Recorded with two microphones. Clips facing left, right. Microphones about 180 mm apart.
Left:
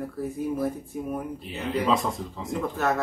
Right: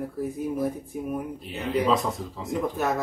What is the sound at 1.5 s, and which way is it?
Speech, centre (ahead or behind).